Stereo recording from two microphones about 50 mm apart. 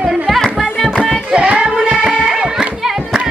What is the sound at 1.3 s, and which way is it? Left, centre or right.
Child singing, right.